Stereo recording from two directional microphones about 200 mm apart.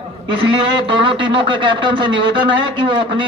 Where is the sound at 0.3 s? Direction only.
25° right (ahead or behind).